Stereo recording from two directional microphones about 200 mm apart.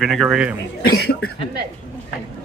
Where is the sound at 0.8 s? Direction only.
50° left (ahead or behind).